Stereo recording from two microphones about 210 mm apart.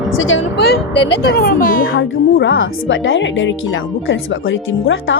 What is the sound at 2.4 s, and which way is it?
Speech, 65° left (ahead or behind).